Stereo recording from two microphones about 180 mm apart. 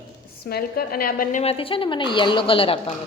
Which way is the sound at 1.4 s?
30° left (ahead or behind).